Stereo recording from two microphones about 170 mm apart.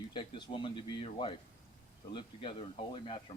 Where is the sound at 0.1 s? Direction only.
25° left (ahead or behind).